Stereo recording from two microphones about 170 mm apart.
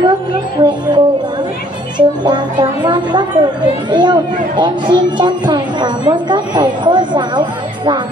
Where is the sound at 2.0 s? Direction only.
25° right (ahead or behind).